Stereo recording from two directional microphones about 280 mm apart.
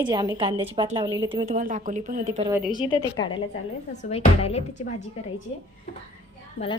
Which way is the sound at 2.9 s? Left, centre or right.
Centre.